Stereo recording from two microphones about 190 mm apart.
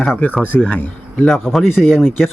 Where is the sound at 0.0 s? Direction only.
10° left (ahead or behind).